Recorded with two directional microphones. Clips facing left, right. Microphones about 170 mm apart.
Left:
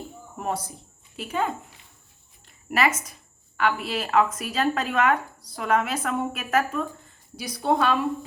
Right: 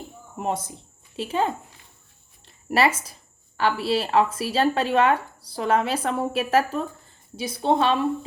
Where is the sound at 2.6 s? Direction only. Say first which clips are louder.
Right 3 dB; 30° right (ahead or behind).